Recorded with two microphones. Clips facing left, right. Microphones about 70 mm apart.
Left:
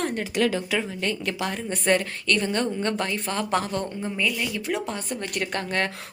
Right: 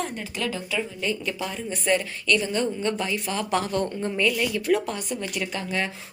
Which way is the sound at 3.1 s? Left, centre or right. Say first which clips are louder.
Even; left.